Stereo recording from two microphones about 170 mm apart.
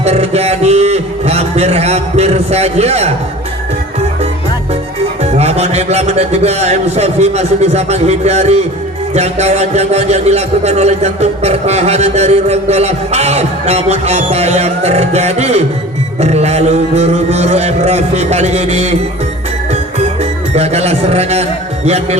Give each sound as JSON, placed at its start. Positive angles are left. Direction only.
{"t": 0.0, "sound": "a sound", "side_deg": -40}
{"t": 5.2, "sound": "a man's voice", "side_deg": -40}
{"t": 20.6, "sound": "a man's voice", "side_deg": -40}